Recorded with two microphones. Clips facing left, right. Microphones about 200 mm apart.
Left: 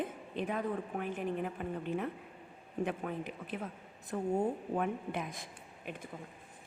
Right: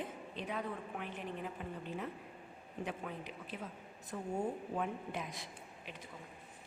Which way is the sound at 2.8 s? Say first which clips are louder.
Left 6 dB; 55° left (ahead or behind).